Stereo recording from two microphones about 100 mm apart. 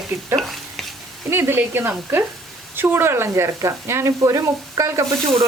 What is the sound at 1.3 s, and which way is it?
Speech, 25° right (ahead or behind).